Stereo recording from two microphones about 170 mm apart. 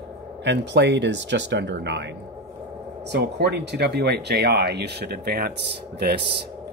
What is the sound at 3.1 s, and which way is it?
Speech, 80° right.